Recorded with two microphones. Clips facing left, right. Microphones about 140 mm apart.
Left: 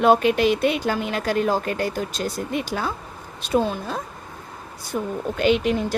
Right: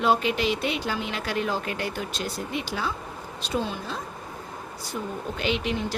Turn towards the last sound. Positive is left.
turn(degrees=50)  # may be behind; listen again after turning